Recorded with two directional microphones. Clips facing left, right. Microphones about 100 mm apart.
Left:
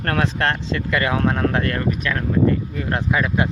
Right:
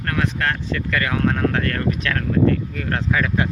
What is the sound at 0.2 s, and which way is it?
Speech, 30° left (ahead or behind).